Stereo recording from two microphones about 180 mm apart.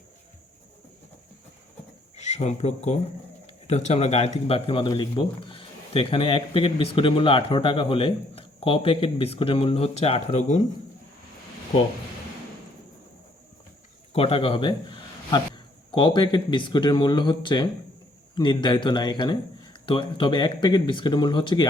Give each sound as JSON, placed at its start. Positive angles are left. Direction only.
{"t": 2.1, "sound": "speech", "side_deg": 40}
{"t": 14.1, "sound": "a man's voice", "side_deg": 35}